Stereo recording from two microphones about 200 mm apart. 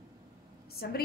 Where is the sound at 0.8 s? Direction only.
50° left (ahead or behind).